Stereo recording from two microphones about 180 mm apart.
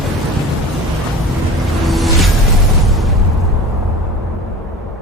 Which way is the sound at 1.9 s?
Centre (ahead or behind).